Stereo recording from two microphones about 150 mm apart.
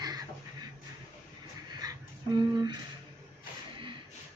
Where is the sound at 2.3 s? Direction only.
30° right (ahead or behind).